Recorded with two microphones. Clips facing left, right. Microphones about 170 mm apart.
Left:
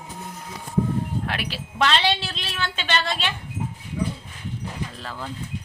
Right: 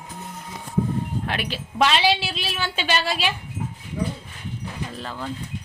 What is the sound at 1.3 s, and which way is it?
A woman's voice, centre (ahead or behind).